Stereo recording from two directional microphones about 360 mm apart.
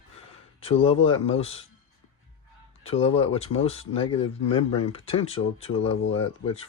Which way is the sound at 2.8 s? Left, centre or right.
Centre.